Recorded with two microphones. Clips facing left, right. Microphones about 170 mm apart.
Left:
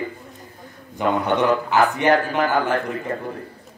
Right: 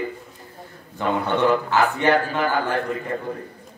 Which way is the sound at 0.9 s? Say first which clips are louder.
Left 2 dB; 15° left (ahead or behind).